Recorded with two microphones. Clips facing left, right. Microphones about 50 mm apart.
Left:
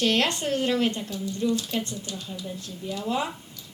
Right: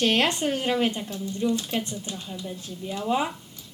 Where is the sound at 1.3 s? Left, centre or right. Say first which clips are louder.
Right 1 dB; right.